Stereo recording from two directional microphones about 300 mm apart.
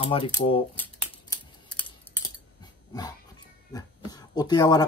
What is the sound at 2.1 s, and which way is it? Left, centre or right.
Cutlery, centre.